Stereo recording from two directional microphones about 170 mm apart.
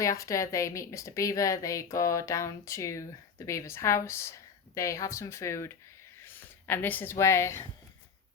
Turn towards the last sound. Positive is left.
turn(degrees=15)  # may be behind; listen again after turning